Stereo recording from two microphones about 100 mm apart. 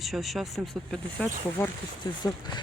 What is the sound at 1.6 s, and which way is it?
Speech, 25° left (ahead or behind).